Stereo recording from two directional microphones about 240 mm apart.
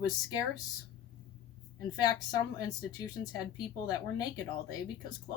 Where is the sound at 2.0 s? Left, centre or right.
Centre.